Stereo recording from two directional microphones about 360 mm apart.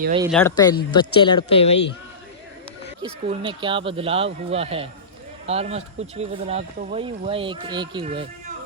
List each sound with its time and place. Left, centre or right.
0.2 s speech: centre
3.0 s speech: centre